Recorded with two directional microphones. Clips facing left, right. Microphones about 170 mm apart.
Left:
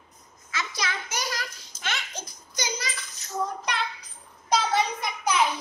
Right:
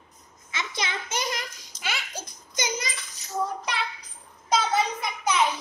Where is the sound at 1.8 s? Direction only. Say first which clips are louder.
Even; 10° right (ahead or behind).